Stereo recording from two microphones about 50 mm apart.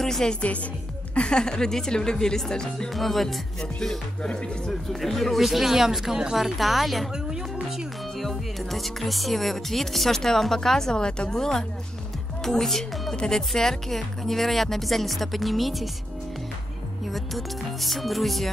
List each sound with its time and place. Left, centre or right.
0.0 s speech: centre
2.9 s speech: centre
4.2 s speech: left
5.0 s speech: centre
7.2 s speech: centre
8.2 s speech: centre
13.1 s speech: centre
17.1 s speech: centre